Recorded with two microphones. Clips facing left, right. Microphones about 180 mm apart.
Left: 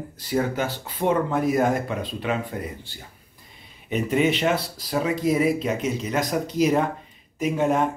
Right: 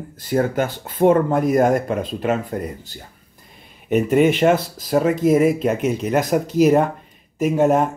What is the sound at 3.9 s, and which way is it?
Speech, 50° right (ahead or behind).